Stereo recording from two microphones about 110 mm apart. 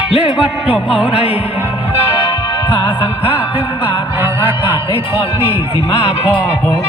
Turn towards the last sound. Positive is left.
turn(degrees=60)  # may be behind; listen again after turning